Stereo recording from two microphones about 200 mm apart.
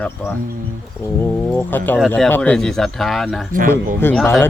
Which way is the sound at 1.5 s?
10° left (ahead or behind).